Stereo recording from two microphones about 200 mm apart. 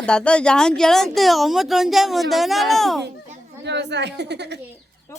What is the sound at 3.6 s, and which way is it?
Speech, 60° right (ahead or behind).